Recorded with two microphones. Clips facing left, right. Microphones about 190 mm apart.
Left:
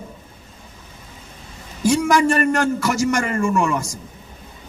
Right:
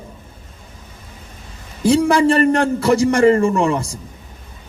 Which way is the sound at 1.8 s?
30° right (ahead or behind).